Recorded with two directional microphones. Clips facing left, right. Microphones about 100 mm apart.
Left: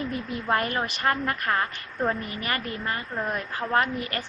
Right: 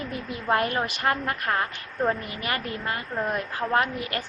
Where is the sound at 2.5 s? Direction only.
10° right (ahead or behind).